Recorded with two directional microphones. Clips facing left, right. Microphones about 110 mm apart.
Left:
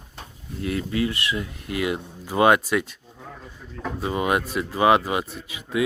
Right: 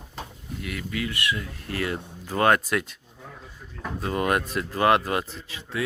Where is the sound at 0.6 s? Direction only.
30° left (ahead or behind); by 2.9 s centre (ahead or behind).